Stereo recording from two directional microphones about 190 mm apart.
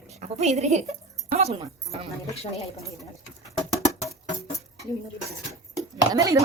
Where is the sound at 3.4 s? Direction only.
15° left (ahead or behind).